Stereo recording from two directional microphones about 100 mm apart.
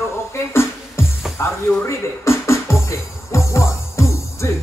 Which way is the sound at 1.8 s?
30° left (ahead or behind).